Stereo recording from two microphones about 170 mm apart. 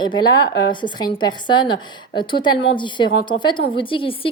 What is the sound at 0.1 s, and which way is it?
A woman's voice, 25° left (ahead or behind).